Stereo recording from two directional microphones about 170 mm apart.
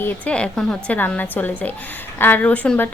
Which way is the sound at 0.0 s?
5° left (ahead or behind).